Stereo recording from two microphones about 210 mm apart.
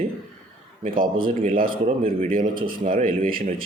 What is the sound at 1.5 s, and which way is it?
Speech, 40° right (ahead or behind).